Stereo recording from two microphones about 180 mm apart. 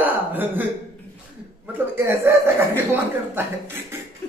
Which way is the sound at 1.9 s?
10° right (ahead or behind).